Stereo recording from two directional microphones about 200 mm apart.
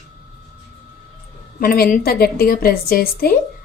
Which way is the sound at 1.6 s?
45° left (ahead or behind).